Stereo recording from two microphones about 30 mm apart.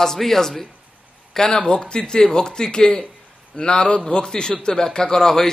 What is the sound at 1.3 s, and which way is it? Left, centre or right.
A man's voice, left.